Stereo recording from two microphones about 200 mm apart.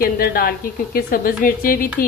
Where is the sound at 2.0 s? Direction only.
45° left (ahead or behind).